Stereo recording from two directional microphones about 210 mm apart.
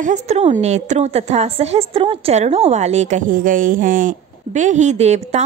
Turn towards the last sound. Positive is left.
turn(degrees=-30)  # may be behind; listen again after turning